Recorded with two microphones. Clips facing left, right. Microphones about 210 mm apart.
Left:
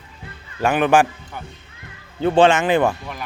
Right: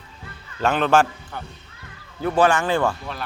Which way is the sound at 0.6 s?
15° left (ahead or behind).